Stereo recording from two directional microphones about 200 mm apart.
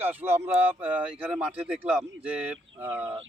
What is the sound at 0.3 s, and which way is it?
Speech, 30° right (ahead or behind).